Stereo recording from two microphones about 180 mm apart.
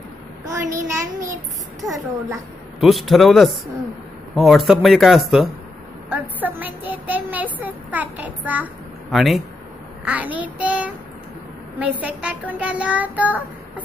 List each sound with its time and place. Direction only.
0.5 s speech: 15° right (ahead or behind)
2.8 s speech: centre (ahead or behind)